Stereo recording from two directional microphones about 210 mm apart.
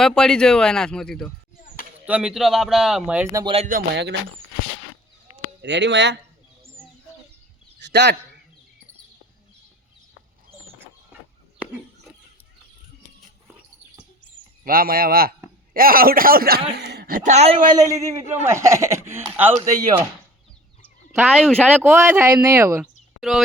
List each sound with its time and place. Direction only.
0.0 s speech: 5° left (ahead or behind)
1.6 s a sound: 40° left (ahead or behind)
2.0 s speech: 5° right (ahead or behind)
3.3 s a man's voice: 25° right (ahead or behind)
3.7 s a man's voice: 45° right (ahead or behind)
5.6 s speech: 55° right (ahead or behind)
7.8 s a sound: 55° right (ahead or behind)
14.6 s a man's voice: 45° right (ahead or behind)
17.2 s a man's voice: 30° right (ahead or behind); by 20.1 s 10° right (ahead or behind)
21.1 s speech: 10° right (ahead or behind)